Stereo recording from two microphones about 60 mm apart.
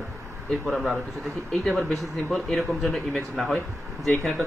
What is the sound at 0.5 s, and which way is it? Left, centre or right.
Speech, centre.